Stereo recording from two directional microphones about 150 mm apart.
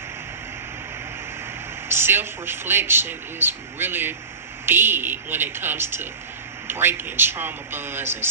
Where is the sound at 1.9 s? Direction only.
15° right (ahead or behind).